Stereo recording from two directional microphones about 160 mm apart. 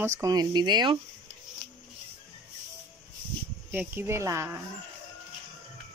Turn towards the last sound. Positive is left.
turn(degrees=-15)  # may be behind; listen again after turning